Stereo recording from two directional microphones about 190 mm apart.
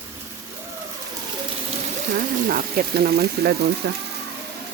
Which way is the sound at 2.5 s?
50° right (ahead or behind).